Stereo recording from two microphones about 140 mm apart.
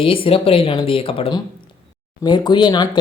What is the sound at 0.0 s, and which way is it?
Speech, 40° left (ahead or behind).